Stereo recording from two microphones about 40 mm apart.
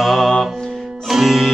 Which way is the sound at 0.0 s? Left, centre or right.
Centre.